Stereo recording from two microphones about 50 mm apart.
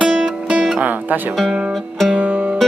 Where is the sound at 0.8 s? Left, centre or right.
Right.